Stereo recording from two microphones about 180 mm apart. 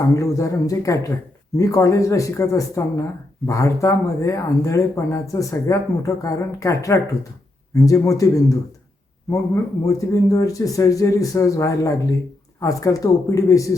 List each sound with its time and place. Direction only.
0.0 s speech: 15° left (ahead or behind)
9.8 s speech: 20° left (ahead or behind)